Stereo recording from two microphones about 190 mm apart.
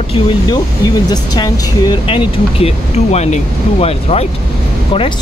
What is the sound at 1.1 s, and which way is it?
Speech, 20° left (ahead or behind).